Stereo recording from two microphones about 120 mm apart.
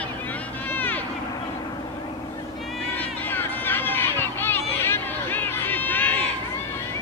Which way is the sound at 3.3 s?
15° left (ahead or behind).